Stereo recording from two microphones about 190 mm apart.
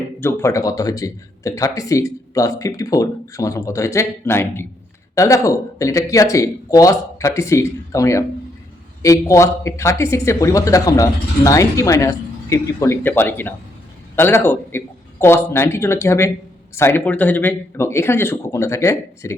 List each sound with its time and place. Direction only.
0.2 s speech: 15° left (ahead or behind)